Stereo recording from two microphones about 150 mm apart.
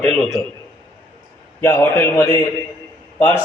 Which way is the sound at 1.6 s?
15° left (ahead or behind).